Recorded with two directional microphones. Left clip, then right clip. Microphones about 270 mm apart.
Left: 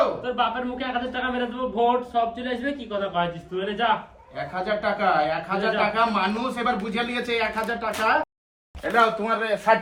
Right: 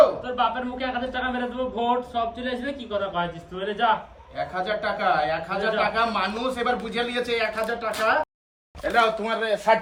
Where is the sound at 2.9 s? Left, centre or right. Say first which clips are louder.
Left 1 dB; left.